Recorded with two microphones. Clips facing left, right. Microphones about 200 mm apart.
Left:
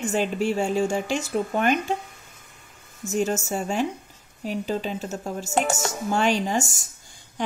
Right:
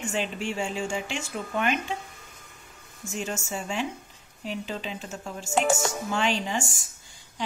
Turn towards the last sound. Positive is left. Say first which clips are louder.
# left 5 dB
turn(degrees=45)  # may be behind; listen again after turning